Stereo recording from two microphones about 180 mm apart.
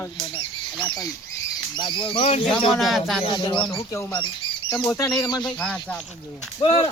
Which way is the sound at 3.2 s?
25° left (ahead or behind).